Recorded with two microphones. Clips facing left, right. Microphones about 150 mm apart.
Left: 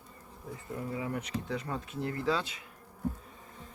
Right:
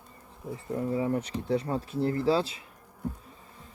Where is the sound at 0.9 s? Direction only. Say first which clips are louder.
Right 6 dB; 30° right (ahead or behind).